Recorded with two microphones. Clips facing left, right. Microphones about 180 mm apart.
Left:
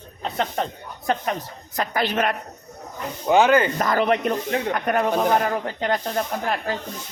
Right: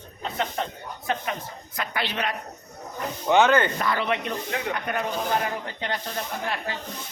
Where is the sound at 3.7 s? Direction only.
45° left (ahead or behind).